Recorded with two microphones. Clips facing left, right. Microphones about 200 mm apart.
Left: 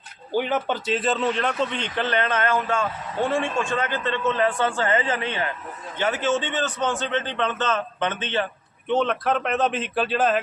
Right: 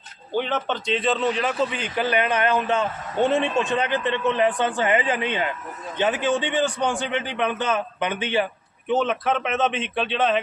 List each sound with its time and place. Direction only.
0.3 s a man's voice: 10° left (ahead or behind)